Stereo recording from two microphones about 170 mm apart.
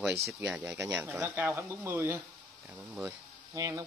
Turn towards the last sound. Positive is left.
turn(degrees=-20)  # may be behind; listen again after turning